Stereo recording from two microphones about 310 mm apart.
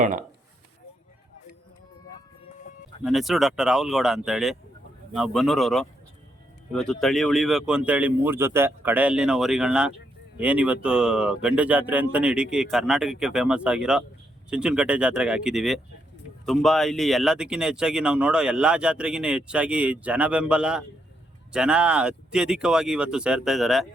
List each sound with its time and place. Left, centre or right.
0.0 s speech: right
3.0 s speech: centre
7.0 s speech: centre